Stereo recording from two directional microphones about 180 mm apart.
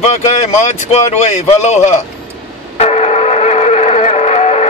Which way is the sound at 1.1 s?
40° left (ahead or behind).